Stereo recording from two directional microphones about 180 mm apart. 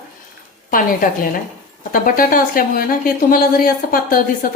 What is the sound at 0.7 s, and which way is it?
A woman's voice, 50° left (ahead or behind).